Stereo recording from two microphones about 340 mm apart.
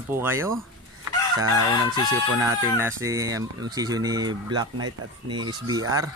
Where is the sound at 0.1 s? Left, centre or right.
Centre.